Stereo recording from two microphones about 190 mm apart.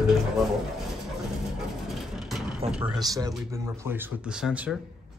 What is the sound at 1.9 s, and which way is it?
Vehicle, centre (ahead or behind).